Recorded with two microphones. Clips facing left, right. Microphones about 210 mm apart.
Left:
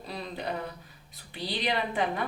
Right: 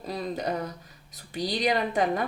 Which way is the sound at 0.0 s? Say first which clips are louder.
Right 5 dB; 45° right (ahead or behind).